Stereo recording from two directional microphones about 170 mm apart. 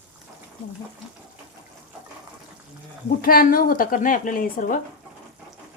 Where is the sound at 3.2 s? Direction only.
60° left (ahead or behind).